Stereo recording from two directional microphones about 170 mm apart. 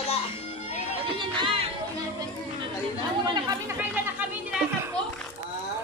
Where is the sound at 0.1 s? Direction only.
40° left (ahead or behind).